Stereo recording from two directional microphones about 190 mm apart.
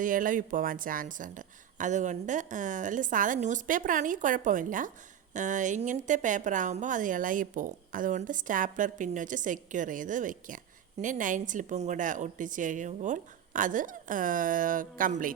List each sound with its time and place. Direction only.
0.0 s speech: 45° right (ahead or behind)